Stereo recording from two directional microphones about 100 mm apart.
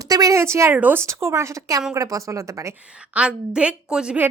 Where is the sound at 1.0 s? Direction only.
30° right (ahead or behind).